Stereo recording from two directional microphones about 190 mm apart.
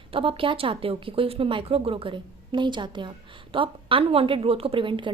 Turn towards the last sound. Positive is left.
turn(degrees=-25)  # may be behind; listen again after turning